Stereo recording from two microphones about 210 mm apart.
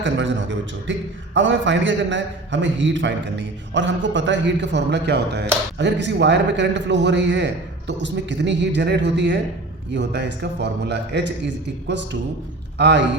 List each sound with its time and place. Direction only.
0.0 s a man's voice: 60° right (ahead or behind)